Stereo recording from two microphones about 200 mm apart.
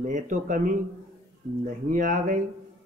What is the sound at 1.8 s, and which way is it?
Speech, 40° right (ahead or behind).